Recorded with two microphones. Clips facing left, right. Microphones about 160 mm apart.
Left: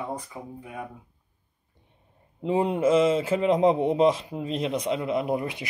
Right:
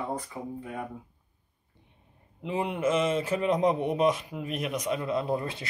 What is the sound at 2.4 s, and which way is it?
A man's voice, 35° left (ahead or behind).